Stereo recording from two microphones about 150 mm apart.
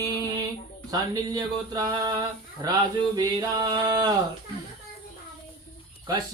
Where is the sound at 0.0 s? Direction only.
25° right (ahead or behind).